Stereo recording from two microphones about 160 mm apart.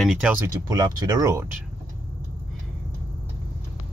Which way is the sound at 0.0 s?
5° right (ahead or behind).